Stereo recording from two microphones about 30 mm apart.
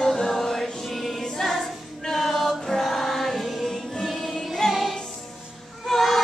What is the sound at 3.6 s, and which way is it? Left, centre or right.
Music, centre.